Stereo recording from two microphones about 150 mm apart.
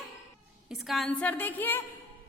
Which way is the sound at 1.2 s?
10° left (ahead or behind).